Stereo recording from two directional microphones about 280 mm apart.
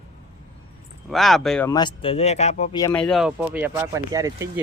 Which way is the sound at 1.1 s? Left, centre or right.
Centre.